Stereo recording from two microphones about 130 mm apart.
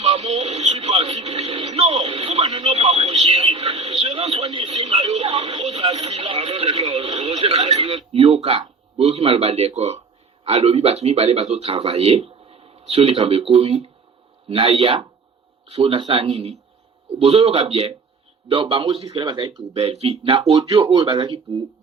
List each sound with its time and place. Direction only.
0.0 s a sound: 55° right (ahead or behind)
1.4 s music: 50° right (ahead or behind)
2.4 s radio: 35° right (ahead or behind)
2.6 s a sound: 50° right (ahead or behind)
5.6 s radio: 55° right (ahead or behind)
9.0 s speech: 55° right (ahead or behind)